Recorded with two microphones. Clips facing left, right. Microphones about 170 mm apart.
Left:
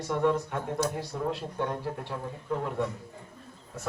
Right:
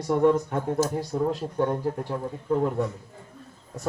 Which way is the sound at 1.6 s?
35° right (ahead or behind).